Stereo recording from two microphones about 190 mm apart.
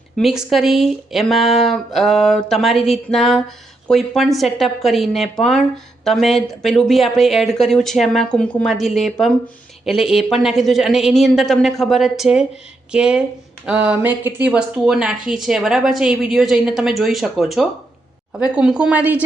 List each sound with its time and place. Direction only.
0.2 s speech: centre (ahead or behind)